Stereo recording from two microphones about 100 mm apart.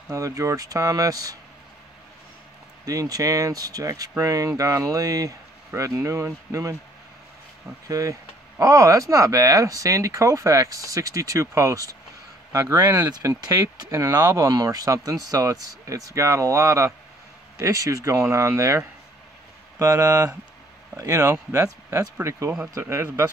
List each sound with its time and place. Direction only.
0.1 s speech: 35° right (ahead or behind)
2.8 s speech: 35° right (ahead or behind)
7.9 s speech: 35° right (ahead or behind)
19.8 s speech: 35° right (ahead or behind)